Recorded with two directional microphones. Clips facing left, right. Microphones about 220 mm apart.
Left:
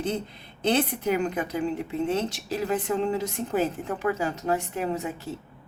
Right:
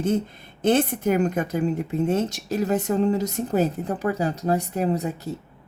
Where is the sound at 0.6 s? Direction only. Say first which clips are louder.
Right 4 dB; 45° right (ahead or behind).